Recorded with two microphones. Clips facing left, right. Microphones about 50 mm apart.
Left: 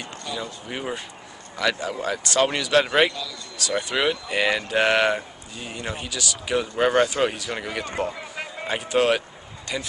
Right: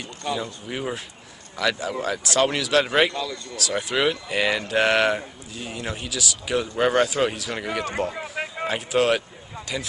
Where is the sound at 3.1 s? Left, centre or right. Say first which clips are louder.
Right 4 dB; right.